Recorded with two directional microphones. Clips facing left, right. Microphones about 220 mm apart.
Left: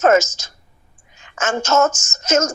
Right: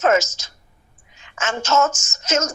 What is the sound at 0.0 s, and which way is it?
A woman's voice, 45° left (ahead or behind).